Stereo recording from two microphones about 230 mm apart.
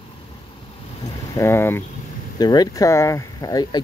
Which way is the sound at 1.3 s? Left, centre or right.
Centre.